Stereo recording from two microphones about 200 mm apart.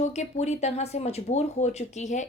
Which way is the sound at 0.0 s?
35° left (ahead or behind).